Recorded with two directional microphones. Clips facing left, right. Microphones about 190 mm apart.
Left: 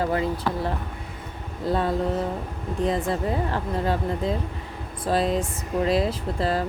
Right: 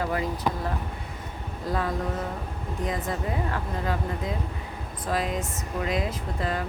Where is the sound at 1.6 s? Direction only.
30° left (ahead or behind).